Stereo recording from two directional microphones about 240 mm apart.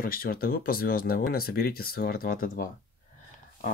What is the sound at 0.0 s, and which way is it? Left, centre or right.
Speech, left.